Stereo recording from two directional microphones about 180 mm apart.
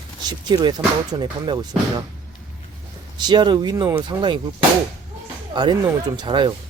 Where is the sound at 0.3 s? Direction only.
20° right (ahead or behind).